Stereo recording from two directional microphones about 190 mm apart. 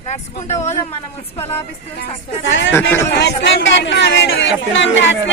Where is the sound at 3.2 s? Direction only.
65° left (ahead or behind).